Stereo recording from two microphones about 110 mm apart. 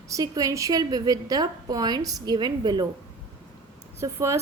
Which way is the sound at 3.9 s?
25° right (ahead or behind).